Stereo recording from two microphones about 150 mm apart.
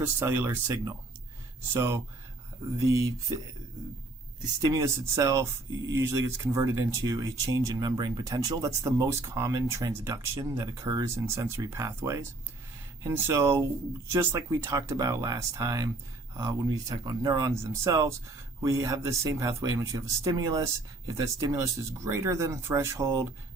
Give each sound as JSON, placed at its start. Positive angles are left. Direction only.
{"t": 0.0, "sound": "speech", "side_deg": -15}
{"t": 4.6, "sound": "speech", "side_deg": -25}